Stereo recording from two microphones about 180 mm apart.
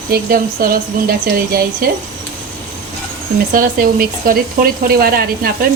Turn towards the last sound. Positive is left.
turn(degrees=-55)  # may be behind; listen again after turning